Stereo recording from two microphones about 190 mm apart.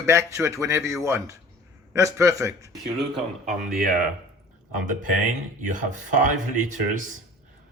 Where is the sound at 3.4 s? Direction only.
50° right (ahead or behind).